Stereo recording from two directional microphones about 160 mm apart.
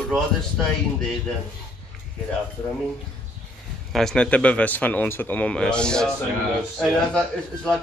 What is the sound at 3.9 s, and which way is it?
A man's voice, 5° left (ahead or behind).